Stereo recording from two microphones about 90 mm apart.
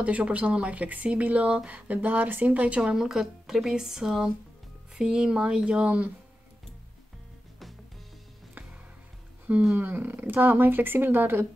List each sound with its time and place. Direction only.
0.0 s speech: 15° right (ahead or behind)
9.5 s speech: 15° right (ahead or behind)